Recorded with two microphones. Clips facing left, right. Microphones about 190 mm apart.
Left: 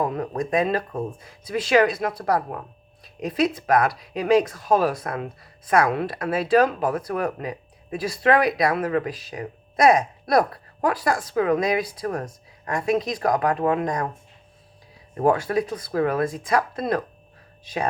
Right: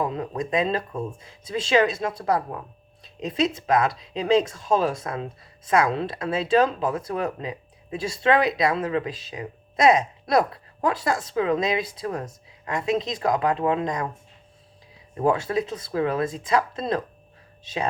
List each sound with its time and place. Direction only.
0.0 s speech: 20° right (ahead or behind)
15.3 s speech: 25° right (ahead or behind)